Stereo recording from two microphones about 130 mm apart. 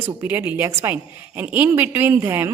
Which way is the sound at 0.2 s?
15° right (ahead or behind).